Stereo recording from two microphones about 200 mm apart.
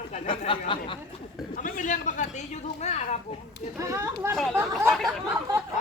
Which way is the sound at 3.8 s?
15° right (ahead or behind).